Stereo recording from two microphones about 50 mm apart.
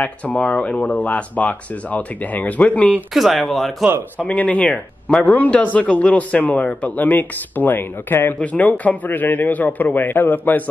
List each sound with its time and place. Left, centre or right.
0.0 s speech: left
3.1 s speech: centre
4.2 s speech: left
8.4 s speech: left